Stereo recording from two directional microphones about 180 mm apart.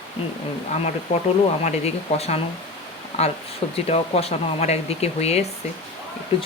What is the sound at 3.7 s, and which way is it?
Speech, 35° left (ahead or behind).